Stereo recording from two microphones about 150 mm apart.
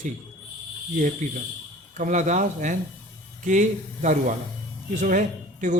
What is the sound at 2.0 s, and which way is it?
Speech, 55° right (ahead or behind).